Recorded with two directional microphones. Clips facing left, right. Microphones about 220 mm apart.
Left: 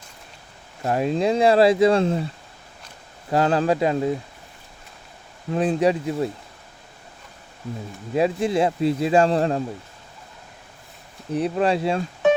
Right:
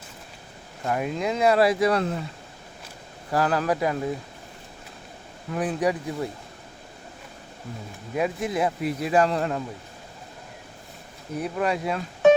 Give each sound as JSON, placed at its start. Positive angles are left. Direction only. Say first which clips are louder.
{"t": 0.9, "sound": "speech", "louder": "left 5 dB", "side_deg": 30}
{"t": 3.3, "sound": "speech", "louder": "left 4 dB", "side_deg": 25}
{"t": 5.5, "sound": "speech", "louder": "left 5 dB", "side_deg": 25}
{"t": 8.1, "sound": "speech", "louder": "left 5 dB", "side_deg": 30}
{"t": 11.3, "sound": "speech", "louder": "left 5 dB", "side_deg": 30}